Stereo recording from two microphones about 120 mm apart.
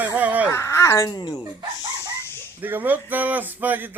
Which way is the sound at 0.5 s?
25° left (ahead or behind).